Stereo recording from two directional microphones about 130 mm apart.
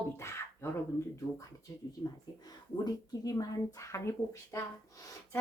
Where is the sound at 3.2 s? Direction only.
25° left (ahead or behind).